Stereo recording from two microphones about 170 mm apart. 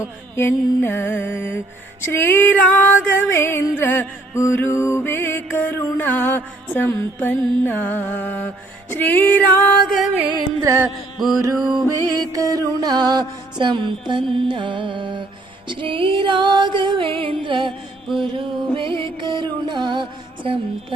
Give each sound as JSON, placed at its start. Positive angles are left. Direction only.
{"t": 0.0, "sound": "music", "side_deg": 15}
{"t": 10.0, "sound": "music", "side_deg": -10}
{"t": 11.9, "sound": "music", "side_deg": -20}